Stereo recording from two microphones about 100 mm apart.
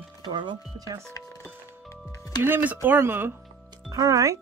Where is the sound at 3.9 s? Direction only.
35° right (ahead or behind).